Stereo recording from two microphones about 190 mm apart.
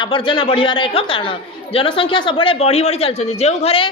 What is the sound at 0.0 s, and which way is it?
A man's voice, 25° left (ahead or behind).